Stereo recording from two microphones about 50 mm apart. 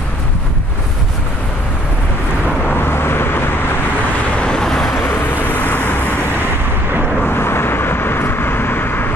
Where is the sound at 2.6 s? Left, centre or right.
Left.